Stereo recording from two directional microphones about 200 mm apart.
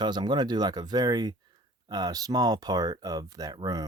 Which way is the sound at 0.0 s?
20° right (ahead or behind).